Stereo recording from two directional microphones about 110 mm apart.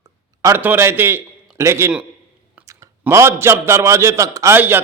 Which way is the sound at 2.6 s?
15° right (ahead or behind).